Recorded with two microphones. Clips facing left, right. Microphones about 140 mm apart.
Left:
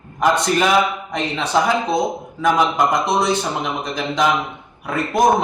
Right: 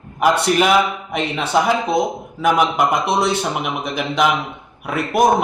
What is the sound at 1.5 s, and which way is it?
Speech, 10° right (ahead or behind).